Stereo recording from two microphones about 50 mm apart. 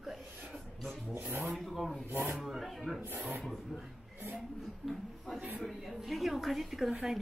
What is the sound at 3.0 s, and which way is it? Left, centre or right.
Speech, right.